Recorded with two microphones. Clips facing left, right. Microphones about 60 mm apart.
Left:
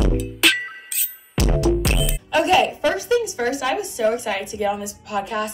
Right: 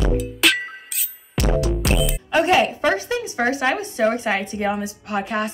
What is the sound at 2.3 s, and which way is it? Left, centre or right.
Speech, right.